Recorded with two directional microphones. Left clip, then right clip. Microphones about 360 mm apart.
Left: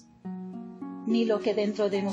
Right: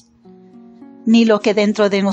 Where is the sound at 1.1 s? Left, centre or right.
Centre.